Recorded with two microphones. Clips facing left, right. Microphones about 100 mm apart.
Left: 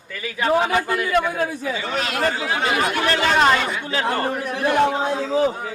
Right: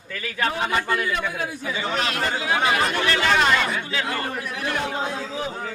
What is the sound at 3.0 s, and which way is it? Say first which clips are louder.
Speech: left 4 dB; 35° left (ahead or behind).